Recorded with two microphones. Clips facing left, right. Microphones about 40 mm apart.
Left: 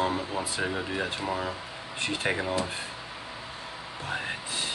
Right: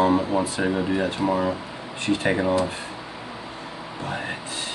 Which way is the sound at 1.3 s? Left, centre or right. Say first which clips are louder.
Right 8 dB; right.